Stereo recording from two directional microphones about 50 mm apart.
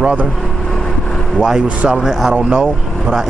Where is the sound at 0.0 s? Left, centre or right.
Right.